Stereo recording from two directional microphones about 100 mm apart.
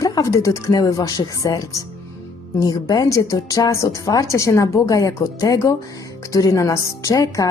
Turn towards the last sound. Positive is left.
turn(degrees=35)  # may be behind; listen again after turning